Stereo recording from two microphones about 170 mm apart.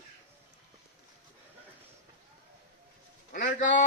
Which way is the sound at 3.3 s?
50° left (ahead or behind).